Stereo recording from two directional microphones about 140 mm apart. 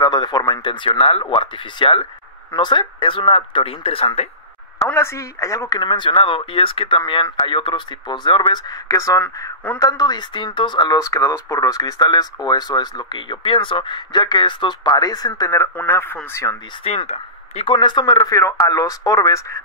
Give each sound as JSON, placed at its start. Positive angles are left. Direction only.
{"t": 0.0, "sound": "speech", "side_deg": 30}
{"t": 4.7, "sound": "speech", "side_deg": 15}
{"t": 16.8, "sound": "speech", "side_deg": 50}
{"t": 17.7, "sound": "speech", "side_deg": 35}